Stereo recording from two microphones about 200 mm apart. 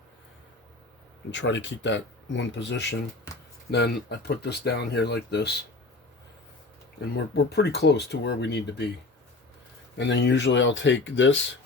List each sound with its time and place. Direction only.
1.3 s speech: 65° left (ahead or behind)
7.3 s speech: 55° left (ahead or behind)
10.0 s speech: 60° left (ahead or behind)